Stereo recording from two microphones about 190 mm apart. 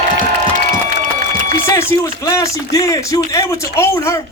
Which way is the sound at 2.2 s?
15° left (ahead or behind).